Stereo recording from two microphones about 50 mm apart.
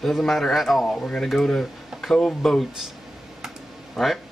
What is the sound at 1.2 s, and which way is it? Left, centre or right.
Speech, centre.